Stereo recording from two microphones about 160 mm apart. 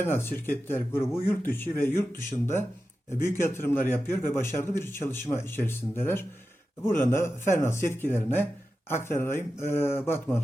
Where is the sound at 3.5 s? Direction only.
15° left (ahead or behind).